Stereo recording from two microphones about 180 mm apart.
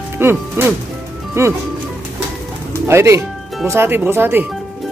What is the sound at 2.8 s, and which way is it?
Speech, 15° right (ahead or behind).